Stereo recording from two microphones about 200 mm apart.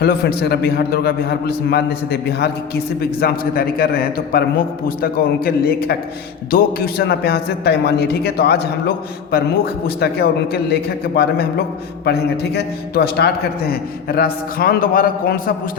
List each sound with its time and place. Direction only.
0.0 s a man's voice: 50° left (ahead or behind)
9.8 s a man's voice: 50° left (ahead or behind)